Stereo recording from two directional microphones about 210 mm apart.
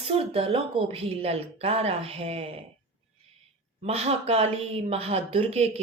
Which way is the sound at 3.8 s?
30° right (ahead or behind).